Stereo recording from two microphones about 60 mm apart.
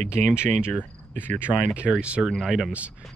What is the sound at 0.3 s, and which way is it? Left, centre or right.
Speech, centre.